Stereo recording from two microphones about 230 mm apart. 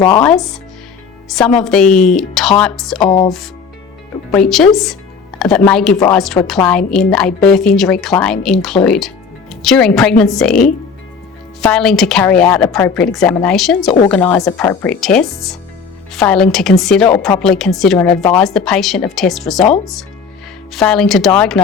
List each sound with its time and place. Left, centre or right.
0.0 s speech: centre
0.3 s a woman's voice: centre